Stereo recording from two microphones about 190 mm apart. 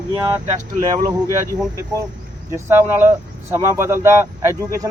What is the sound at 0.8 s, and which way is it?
Speech, 20° right (ahead or behind).